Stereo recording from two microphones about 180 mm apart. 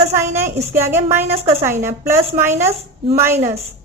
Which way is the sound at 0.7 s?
15° right (ahead or behind).